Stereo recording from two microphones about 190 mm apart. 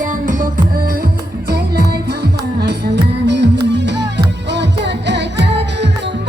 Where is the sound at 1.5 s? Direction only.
55° right (ahead or behind).